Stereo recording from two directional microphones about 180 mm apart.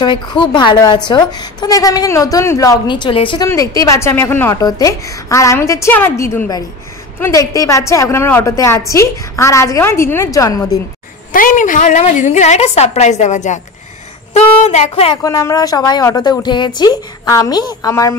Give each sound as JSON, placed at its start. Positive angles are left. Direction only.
{"t": 0.0, "sound": "a woman's voice", "side_deg": 25}
{"t": 3.4, "sound": "a woman's voice", "side_deg": 15}
{"t": 11.3, "sound": "a woman's voice", "side_deg": 50}
{"t": 15.2, "sound": "a woman's voice", "side_deg": 20}